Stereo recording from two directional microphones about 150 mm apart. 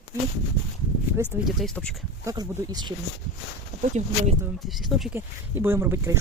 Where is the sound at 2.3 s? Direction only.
25° right (ahead or behind).